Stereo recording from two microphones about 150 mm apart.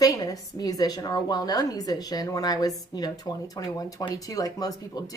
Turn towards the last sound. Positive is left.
turn(degrees=25)  # may be behind; listen again after turning